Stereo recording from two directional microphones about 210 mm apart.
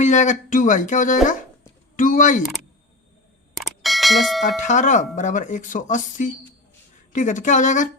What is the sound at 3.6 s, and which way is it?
Bicycle bell, centre (ahead or behind).